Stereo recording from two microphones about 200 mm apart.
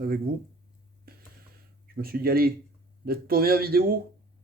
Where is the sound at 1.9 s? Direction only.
50° right (ahead or behind).